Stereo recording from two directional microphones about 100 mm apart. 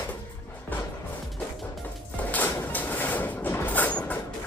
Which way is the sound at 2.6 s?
15° left (ahead or behind).